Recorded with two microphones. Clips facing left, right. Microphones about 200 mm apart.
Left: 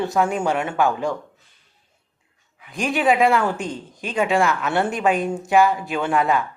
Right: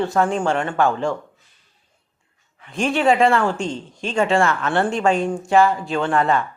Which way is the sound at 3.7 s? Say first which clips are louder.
Right 3 dB; 15° left (ahead or behind).